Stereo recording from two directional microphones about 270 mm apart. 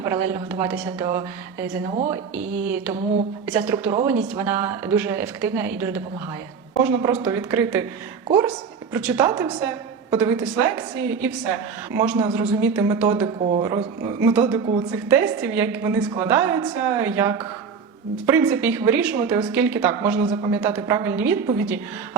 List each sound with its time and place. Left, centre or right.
0.7 s a woman's voice: centre
13.2 s speech: right
14.3 s a woman's voice: centre